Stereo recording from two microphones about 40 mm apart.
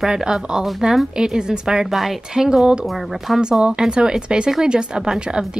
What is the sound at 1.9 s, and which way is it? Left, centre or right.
Speech, centre.